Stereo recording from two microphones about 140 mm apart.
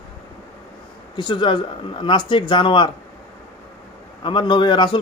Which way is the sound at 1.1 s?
35° left (ahead or behind).